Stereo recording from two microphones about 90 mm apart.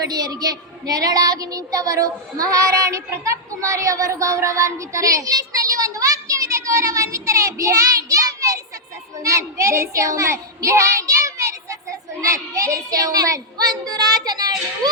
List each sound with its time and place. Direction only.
0.1 s a woman's voice: 50° right (ahead or behind)